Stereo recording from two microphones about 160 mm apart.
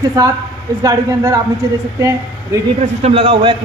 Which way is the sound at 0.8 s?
20° right (ahead or behind).